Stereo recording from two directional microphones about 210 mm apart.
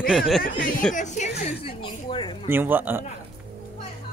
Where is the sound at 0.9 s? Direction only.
35° left (ahead or behind).